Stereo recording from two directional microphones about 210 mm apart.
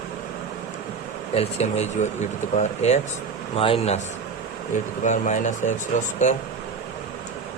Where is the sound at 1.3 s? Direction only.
30° left (ahead or behind).